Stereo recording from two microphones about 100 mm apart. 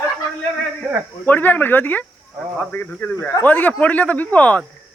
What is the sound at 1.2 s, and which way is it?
Speech, 20° left (ahead or behind).